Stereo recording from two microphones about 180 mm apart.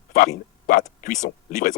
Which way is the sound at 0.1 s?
50° left (ahead or behind).